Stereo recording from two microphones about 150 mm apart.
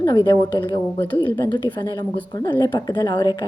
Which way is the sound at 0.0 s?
30° left (ahead or behind).